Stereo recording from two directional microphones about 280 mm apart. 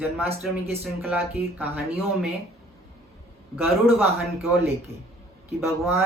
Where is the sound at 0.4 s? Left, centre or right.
Centre.